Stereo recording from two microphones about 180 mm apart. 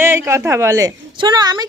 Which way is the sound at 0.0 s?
15° right (ahead or behind).